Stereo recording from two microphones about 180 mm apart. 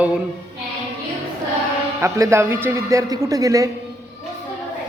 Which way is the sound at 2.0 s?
15° right (ahead or behind).